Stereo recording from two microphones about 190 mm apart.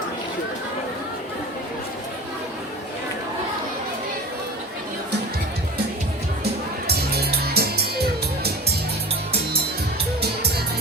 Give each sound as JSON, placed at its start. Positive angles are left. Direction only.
{"t": 6.4, "sound": "music", "side_deg": -55}